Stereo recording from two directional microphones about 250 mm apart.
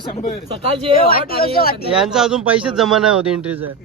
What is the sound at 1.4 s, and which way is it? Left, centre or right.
Speech, left.